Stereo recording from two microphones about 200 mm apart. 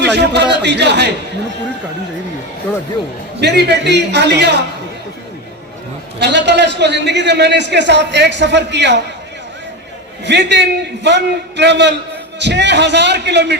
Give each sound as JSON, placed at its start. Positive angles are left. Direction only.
{"t": 0.0, "sound": "a man's voice", "side_deg": -60}
{"t": 3.4, "sound": "a man's voice", "side_deg": -55}
{"t": 6.1, "sound": "a man's voice", "side_deg": -60}
{"t": 10.2, "sound": "a man's voice", "side_deg": -60}